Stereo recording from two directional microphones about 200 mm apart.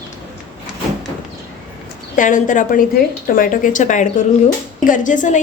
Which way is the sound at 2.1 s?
40° left (ahead or behind).